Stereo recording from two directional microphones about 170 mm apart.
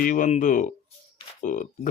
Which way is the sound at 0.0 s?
50° left (ahead or behind).